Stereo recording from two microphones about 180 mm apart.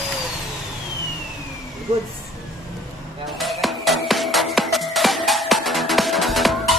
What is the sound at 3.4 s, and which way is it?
Music, centre (ahead or behind).